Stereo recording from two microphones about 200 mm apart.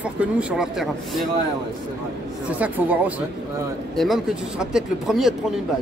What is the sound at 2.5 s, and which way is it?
A woman's voice, 10° right (ahead or behind).